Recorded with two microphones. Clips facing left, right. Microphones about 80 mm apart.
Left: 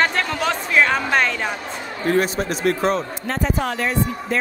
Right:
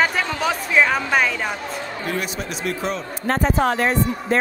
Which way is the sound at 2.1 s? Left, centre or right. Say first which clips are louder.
Left 9 dB; left.